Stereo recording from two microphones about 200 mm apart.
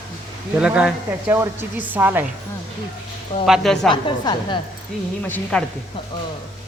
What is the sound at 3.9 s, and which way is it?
Speech, 25° left (ahead or behind).